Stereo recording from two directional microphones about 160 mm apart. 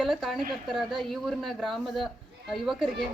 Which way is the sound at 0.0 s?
Centre (ahead or behind).